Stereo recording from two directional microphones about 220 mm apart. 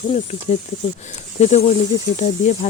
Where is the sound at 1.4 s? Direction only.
30° left (ahead or behind).